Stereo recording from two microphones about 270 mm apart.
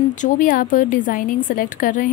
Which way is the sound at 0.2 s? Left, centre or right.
Left.